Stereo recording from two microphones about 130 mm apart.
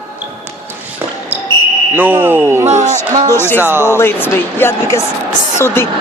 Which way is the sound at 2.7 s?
70° right (ahead or behind).